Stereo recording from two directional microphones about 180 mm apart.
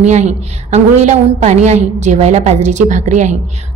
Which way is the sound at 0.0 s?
40° right (ahead or behind).